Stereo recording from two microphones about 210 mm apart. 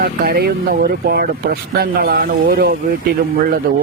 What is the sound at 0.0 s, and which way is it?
Speech, 45° right (ahead or behind).